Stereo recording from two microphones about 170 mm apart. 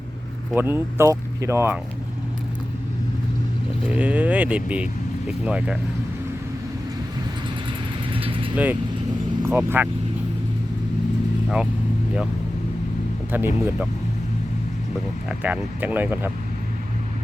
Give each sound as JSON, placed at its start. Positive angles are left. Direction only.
{"t": 0.5, "sound": "speech", "side_deg": -10}
{"t": 3.8, "sound": "speech", "side_deg": -10}
{"t": 8.1, "sound": "vehicle", "side_deg": -30}
{"t": 9.4, "sound": "speech", "side_deg": -15}
{"t": 11.4, "sound": "speech", "side_deg": -5}
{"t": 13.3, "sound": "speech", "side_deg": -10}
{"t": 15.3, "sound": "speech", "side_deg": -10}